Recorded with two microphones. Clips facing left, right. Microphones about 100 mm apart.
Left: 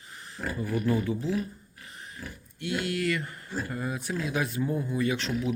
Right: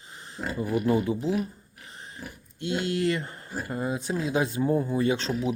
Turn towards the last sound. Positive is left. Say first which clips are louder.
# right 3 dB
turn(degrees=-30)  # may be behind; listen again after turning